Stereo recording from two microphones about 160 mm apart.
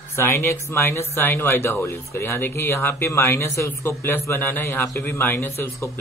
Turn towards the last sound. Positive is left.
turn(degrees=15)  # may be behind; listen again after turning